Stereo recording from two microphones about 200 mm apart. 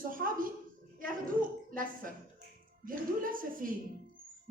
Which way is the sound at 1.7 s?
45° right (ahead or behind).